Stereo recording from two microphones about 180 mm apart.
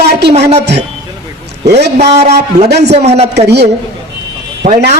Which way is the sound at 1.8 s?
65° right (ahead or behind).